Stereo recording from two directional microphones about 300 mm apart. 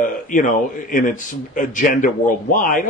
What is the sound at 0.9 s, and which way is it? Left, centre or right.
Speech, left.